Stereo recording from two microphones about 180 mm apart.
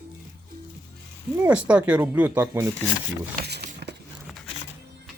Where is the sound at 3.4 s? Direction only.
65° right (ahead or behind).